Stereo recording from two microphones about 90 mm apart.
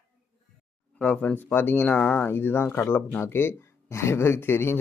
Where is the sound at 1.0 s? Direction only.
15° left (ahead or behind).